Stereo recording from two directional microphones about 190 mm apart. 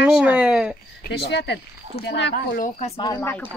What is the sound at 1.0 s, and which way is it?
Speech, 60° left (ahead or behind).